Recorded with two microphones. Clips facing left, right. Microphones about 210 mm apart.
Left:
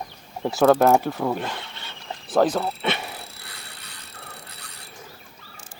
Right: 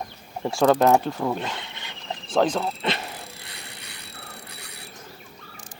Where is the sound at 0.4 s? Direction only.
5° left (ahead or behind).